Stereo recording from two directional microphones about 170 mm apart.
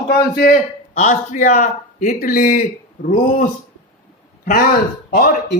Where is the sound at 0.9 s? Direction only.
45° left (ahead or behind).